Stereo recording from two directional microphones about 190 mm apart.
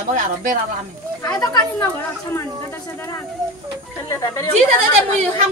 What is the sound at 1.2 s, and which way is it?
Speech, 20° left (ahead or behind).